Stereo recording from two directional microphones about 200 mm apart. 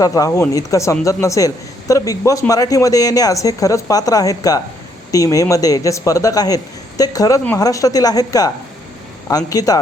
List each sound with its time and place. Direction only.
0.0 s speech: 15° left (ahead or behind)